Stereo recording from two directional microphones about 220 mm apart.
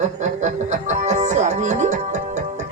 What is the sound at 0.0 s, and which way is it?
Music, 30° right (ahead or behind).